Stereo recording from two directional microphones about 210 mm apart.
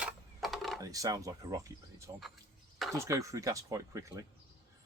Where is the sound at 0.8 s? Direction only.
15° right (ahead or behind).